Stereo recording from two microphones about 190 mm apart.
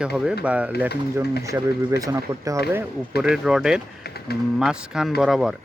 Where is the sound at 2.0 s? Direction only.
15° right (ahead or behind).